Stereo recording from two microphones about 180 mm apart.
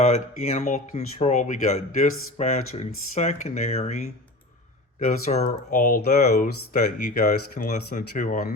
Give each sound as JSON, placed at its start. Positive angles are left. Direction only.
{"t": 0.0, "sound": "speech", "side_deg": 40}
{"t": 4.9, "sound": "speech", "side_deg": 50}
{"t": 5.3, "sound": "speech", "side_deg": 40}